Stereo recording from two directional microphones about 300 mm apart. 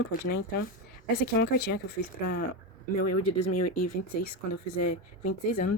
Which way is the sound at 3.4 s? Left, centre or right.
Left.